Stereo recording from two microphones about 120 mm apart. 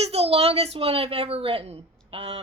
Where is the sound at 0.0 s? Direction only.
55° right (ahead or behind).